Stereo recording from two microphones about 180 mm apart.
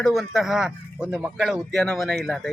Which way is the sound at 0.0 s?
Centre (ahead or behind).